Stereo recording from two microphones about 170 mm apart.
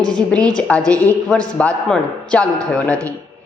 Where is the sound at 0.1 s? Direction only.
5° left (ahead or behind).